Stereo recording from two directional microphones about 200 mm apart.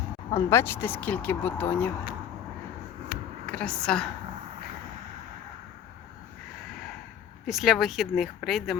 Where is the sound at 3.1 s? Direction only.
45° left (ahead or behind).